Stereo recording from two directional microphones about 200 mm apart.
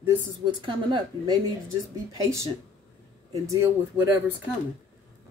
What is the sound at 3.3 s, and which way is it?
Speech, 15° right (ahead or behind).